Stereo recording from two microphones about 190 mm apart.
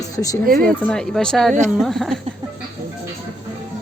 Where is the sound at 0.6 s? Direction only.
5° left (ahead or behind).